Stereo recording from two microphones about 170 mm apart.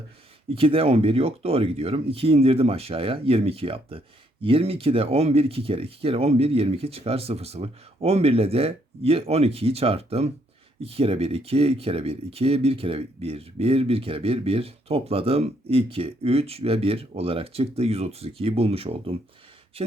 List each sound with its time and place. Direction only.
0.5 s speech: 35° right (ahead or behind)